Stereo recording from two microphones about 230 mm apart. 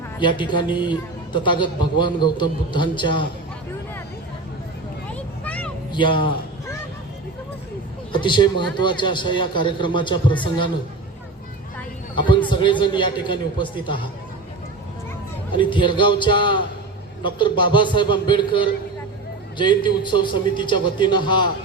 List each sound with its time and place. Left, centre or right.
0.2 s a man's voice: centre
5.1 s vehicle: centre
5.9 s a sound: left
8.1 s a man's voice: left
12.1 s a man's voice: left
15.5 s a man's voice: left